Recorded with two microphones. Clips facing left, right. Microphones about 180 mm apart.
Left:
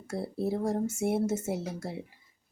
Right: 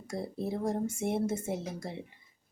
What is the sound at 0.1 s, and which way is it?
Speech, 5° left (ahead or behind).